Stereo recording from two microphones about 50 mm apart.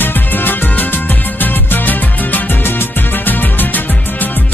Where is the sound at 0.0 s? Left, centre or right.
Left.